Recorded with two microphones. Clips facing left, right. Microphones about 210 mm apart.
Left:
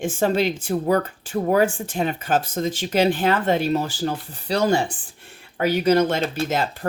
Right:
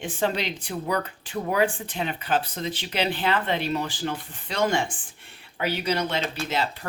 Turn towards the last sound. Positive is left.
turn(degrees=45)  # may be behind; listen again after turning